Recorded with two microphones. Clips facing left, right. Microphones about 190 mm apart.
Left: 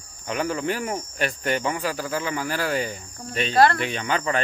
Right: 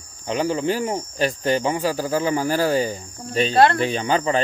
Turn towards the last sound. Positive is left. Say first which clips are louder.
# right 5 dB
turn(degrees=-30)  # may be behind; listen again after turning